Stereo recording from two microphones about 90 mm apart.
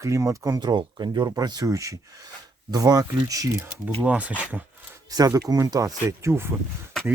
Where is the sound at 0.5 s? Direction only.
55° right (ahead or behind); by 3.5 s 40° right (ahead or behind).